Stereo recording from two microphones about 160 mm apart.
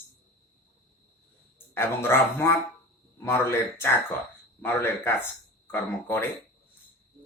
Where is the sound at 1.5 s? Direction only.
15° left (ahead or behind).